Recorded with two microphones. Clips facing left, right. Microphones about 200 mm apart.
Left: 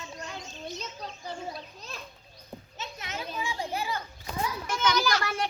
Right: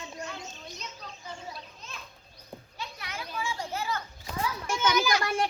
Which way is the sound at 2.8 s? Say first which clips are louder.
Left 2 dB; 20° left (ahead or behind).